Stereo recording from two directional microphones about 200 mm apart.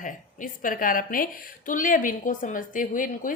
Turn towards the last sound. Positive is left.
turn(degrees=40)  # may be behind; listen again after turning